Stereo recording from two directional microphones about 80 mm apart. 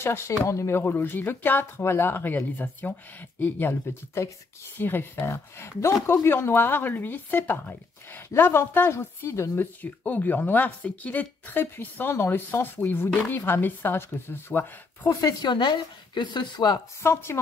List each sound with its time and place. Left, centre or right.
0.0 s speech: left
4.7 s speech: left
5.3 s speech: left
15.0 s speech: left
15.5 s a woman's voice: left
17.0 s speech: left